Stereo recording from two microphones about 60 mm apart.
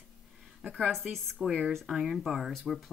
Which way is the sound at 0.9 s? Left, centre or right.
Centre.